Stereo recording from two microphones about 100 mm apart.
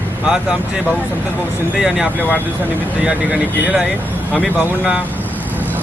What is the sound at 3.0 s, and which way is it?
Speech, 10° right (ahead or behind).